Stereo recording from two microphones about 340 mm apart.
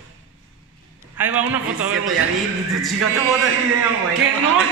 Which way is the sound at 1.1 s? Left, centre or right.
Centre.